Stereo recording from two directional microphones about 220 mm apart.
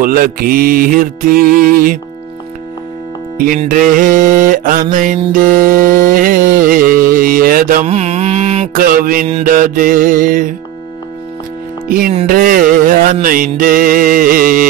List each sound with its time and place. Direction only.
0.0 s music: 40° right (ahead or behind)
3.3 s music: 40° right (ahead or behind)
12.3 s music: 40° right (ahead or behind)